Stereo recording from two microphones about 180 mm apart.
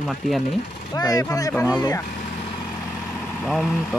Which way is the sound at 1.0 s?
20° left (ahead or behind).